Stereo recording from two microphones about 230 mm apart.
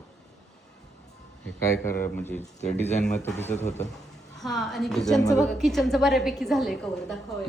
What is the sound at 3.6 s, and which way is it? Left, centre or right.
Speech, left.